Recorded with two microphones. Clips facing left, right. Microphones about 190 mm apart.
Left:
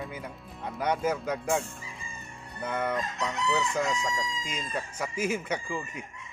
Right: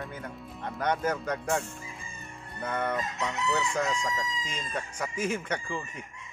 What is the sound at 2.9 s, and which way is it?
Chicken, centre (ahead or behind).